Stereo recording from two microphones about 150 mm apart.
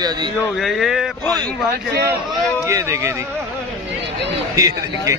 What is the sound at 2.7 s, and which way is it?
Speech, 20° right (ahead or behind).